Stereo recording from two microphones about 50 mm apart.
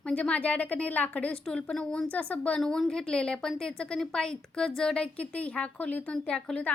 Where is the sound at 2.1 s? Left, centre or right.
Left.